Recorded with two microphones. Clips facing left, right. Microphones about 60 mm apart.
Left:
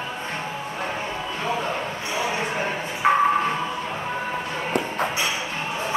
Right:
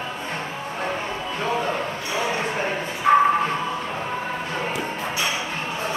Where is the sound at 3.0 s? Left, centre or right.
Left.